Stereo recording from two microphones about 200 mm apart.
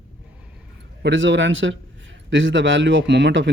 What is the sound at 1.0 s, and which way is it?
A man's voice, 70° right (ahead or behind).